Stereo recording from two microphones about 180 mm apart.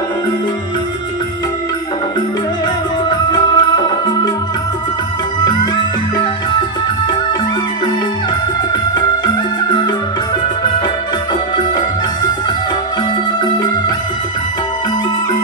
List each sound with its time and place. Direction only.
3.1 s music: 25° left (ahead or behind)